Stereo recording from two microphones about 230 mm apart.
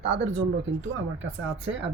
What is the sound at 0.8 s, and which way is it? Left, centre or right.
Speech, right.